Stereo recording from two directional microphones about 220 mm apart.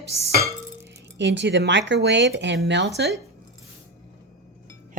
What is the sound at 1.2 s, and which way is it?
Speech, 50° right (ahead or behind).